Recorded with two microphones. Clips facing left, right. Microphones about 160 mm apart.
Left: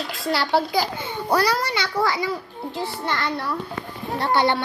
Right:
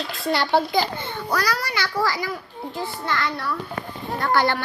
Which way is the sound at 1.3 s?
30° left (ahead or behind).